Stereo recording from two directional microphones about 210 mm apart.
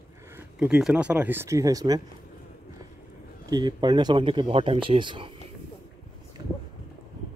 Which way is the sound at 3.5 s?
20° right (ahead or behind).